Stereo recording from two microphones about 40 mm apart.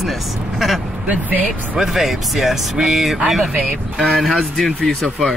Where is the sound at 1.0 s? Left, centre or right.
Right.